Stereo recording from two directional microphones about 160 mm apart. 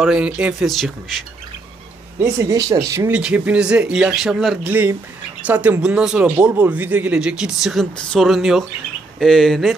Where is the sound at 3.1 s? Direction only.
5° right (ahead or behind).